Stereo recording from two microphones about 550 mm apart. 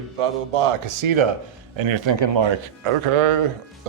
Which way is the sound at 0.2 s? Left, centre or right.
Right.